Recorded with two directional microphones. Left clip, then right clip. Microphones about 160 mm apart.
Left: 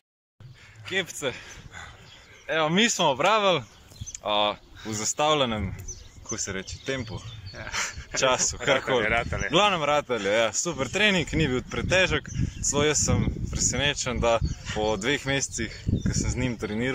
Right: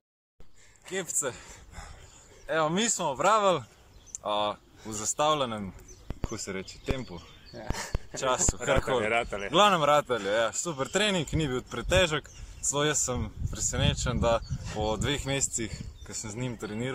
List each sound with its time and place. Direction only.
0.8 s speech: centre (ahead or behind)
7.5 s dog: 25° right (ahead or behind)
8.2 s speech: centre (ahead or behind)